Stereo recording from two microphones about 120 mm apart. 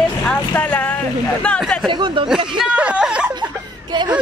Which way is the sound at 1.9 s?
40° right (ahead or behind).